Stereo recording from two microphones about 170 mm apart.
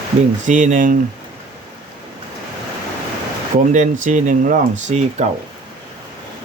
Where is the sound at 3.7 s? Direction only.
45° right (ahead or behind).